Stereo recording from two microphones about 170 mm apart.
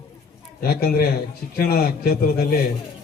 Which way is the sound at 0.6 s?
65° left (ahead or behind).